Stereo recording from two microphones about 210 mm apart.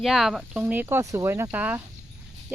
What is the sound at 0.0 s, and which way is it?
Speech, centre (ahead or behind).